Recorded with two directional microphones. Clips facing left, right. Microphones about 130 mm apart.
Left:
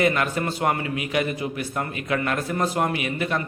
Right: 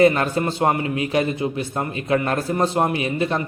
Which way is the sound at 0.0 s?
30° right (ahead or behind).